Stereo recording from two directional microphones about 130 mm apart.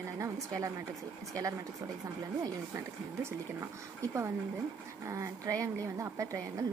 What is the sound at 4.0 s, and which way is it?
A woman's voice, 20° right (ahead or behind).